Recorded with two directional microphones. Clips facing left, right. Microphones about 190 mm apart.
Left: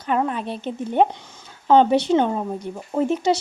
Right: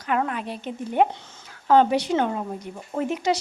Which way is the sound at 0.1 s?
30° left (ahead or behind).